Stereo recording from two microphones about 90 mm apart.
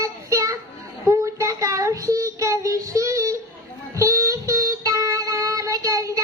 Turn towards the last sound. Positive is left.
turn(degrees=-40)  # may be behind; listen again after turning